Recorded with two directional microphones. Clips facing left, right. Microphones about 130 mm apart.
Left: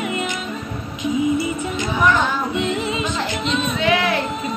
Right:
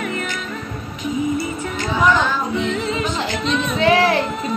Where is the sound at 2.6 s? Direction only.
15° left (ahead or behind).